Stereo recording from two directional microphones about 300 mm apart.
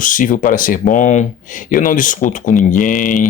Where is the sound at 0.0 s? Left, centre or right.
Left.